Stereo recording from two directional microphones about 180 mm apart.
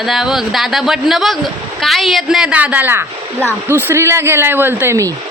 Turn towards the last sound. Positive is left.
turn(degrees=-15)  # may be behind; listen again after turning